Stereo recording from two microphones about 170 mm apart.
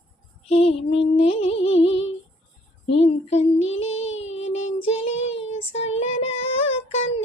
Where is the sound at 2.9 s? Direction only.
35° left (ahead or behind).